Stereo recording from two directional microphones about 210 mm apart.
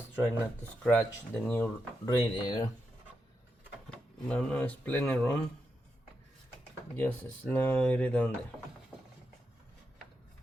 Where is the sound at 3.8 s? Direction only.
5° left (ahead or behind).